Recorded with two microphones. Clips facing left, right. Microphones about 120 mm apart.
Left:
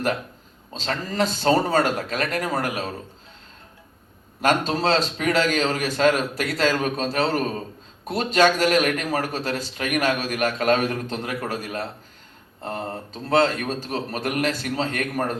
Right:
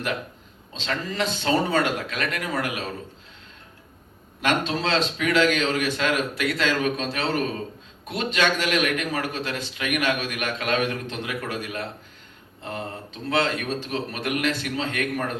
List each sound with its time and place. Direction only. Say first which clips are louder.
0.7 s a man's voice: left 1 dB; 40° left (ahead or behind)
4.4 s a man's voice: left 3 dB; 40° left (ahead or behind)